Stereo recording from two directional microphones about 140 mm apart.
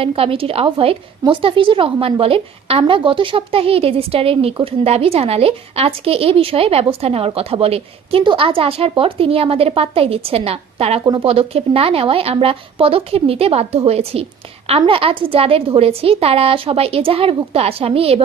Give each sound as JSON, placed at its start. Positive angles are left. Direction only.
{"t": 0.0, "sound": "a woman's voice", "side_deg": -40}